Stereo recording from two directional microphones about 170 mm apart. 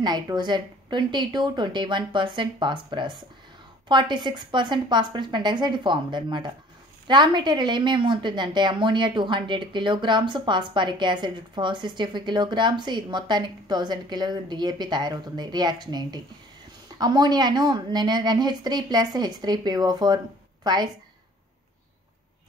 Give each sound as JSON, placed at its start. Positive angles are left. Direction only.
{"t": 0.0, "sound": "a woman's voice", "side_deg": -25}